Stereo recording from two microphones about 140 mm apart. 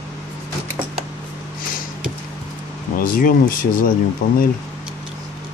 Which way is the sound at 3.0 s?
85° left.